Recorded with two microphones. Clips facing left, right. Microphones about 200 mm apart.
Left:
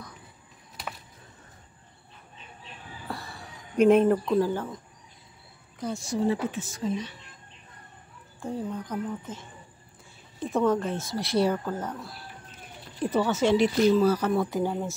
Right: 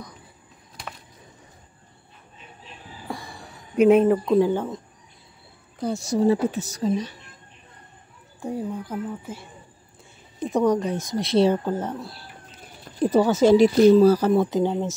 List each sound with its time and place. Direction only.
3.1 s a sound: 15° right (ahead or behind)
4.4 s speech: 20° right (ahead or behind)
6.0 s speech: 40° right (ahead or behind)
8.4 s speech: 15° right (ahead or behind); by 14.3 s 35° right (ahead or behind)
14.3 s speech: 20° right (ahead or behind)